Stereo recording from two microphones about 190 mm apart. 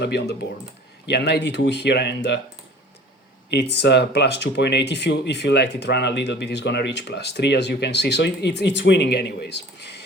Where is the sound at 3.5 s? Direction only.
60° left (ahead or behind).